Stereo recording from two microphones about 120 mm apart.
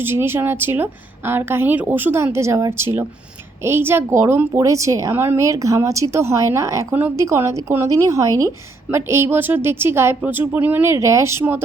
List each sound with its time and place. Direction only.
0.0 s speech: 20° right (ahead or behind)